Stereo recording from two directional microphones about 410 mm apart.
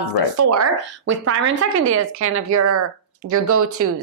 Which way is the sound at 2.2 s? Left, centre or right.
Right.